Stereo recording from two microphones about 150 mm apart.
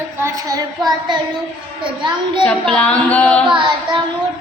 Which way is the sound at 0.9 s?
30° right (ahead or behind).